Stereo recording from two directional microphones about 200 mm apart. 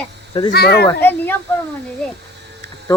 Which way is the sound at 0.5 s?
55° left (ahead or behind).